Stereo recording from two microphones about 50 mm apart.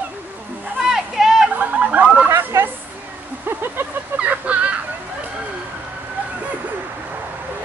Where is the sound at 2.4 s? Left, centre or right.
Right.